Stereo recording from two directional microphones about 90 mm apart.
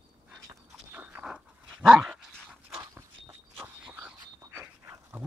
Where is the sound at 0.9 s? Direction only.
15° right (ahead or behind).